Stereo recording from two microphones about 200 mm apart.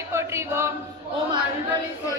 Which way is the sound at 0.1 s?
15° right (ahead or behind).